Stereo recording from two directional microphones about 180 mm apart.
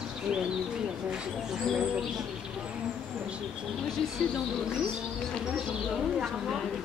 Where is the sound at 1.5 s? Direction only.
Centre (ahead or behind).